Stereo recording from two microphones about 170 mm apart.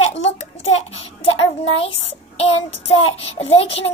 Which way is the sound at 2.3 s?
35° left (ahead or behind).